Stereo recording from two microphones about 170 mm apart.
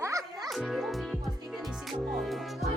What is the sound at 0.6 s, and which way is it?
Music, centre (ahead or behind).